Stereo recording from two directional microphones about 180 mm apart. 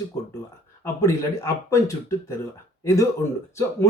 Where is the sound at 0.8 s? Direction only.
15° left (ahead or behind).